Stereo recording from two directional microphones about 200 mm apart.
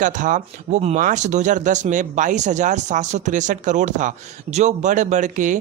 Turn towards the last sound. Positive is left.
turn(degrees=-40)  # may be behind; listen again after turning